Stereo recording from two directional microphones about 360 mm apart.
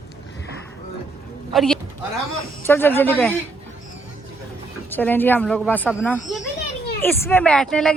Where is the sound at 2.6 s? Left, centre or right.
Centre.